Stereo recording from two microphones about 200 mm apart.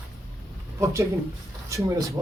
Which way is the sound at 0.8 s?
15° right (ahead or behind).